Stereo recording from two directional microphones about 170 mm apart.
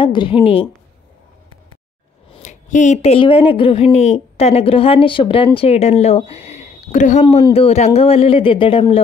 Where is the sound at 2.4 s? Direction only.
45° left (ahead or behind).